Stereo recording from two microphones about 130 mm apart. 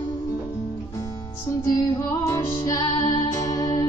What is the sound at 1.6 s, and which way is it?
Music, 25° left (ahead or behind).